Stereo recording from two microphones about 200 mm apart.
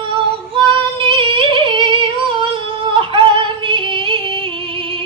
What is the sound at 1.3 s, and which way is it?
Singing, 25° right (ahead or behind).